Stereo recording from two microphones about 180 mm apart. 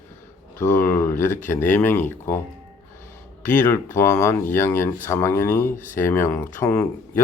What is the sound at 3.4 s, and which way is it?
Speech, 10° left (ahead or behind).